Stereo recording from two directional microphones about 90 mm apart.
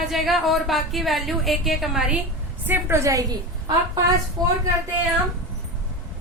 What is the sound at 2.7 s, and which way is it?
A woman's voice, 30° right (ahead or behind).